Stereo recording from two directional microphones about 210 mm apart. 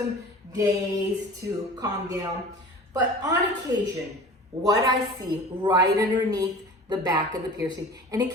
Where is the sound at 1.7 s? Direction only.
15° right (ahead or behind).